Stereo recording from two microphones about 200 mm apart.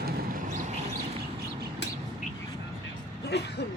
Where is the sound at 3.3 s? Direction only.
55° left (ahead or behind).